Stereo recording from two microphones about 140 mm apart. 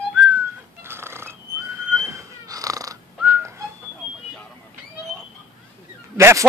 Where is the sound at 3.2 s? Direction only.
20° right (ahead or behind).